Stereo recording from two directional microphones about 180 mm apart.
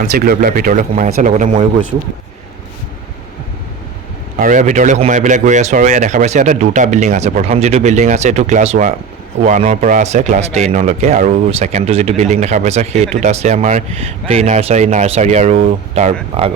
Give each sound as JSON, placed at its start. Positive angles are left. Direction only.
{"t": 0.1, "sound": "speech", "side_deg": -55}
{"t": 4.4, "sound": "speech", "side_deg": -45}